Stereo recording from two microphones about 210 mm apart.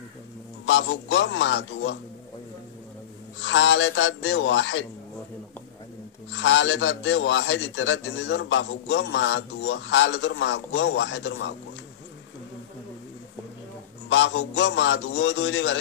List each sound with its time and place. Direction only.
0.7 s a man's voice: 65° left (ahead or behind)
3.3 s a man's voice: 65° left (ahead or behind)
6.3 s a man's voice: 65° left (ahead or behind)
14.0 s a man's voice: 65° left (ahead or behind)